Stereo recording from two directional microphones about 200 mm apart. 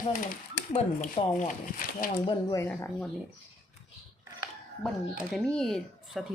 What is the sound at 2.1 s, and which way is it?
Speech, 20° left (ahead or behind).